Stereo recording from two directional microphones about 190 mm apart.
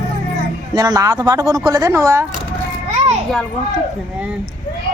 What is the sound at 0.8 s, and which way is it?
Speech, 20° right (ahead or behind).